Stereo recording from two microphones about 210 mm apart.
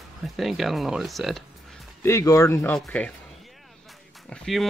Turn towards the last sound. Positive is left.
turn(degrees=0)  # may be behind; listen again after turning